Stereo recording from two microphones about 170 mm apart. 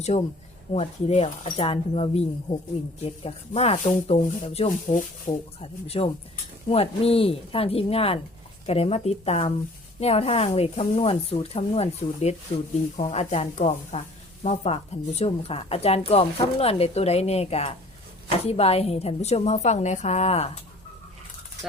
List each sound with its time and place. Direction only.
0.1 s a woman's voice: 45° left (ahead or behind)
4.9 s speech: 50° left (ahead or behind)
5.5 s a woman's voice: 35° left (ahead or behind)